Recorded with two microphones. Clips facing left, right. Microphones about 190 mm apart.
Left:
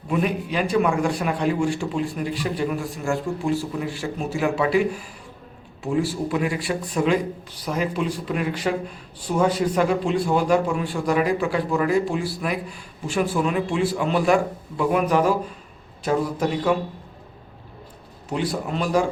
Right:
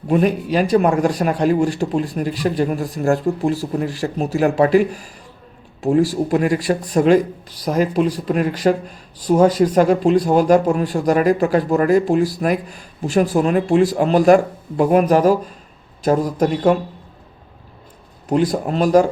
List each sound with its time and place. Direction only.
0.1 s speech: 40° right (ahead or behind)
18.3 s speech: 45° right (ahead or behind)